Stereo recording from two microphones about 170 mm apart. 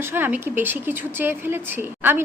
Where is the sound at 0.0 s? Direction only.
10° right (ahead or behind).